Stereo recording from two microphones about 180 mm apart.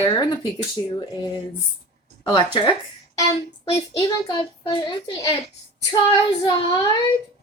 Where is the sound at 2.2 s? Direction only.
25° left (ahead or behind).